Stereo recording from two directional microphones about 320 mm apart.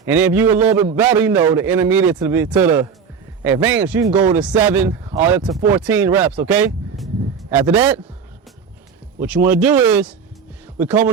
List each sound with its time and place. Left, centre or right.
0.0 s a man's voice: centre
9.2 s speech: centre